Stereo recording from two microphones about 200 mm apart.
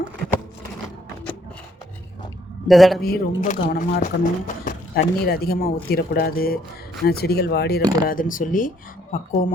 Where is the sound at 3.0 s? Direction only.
45° left (ahead or behind).